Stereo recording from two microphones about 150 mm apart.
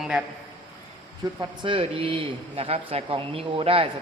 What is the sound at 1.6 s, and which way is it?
A man's voice, 35° right (ahead or behind).